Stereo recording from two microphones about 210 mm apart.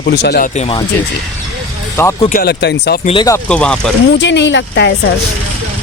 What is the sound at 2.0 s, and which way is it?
Speech, 15° left (ahead or behind).